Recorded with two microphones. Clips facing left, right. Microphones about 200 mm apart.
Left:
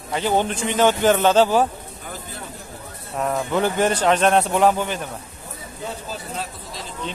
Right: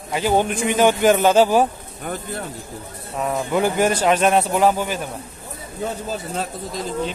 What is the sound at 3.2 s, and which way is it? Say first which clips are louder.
Speech: right 1 dB; 5° right (ahead or behind).